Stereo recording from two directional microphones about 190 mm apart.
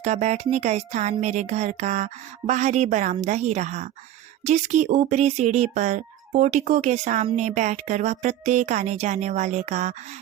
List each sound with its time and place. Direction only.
0.0 s speech: 35° right (ahead or behind)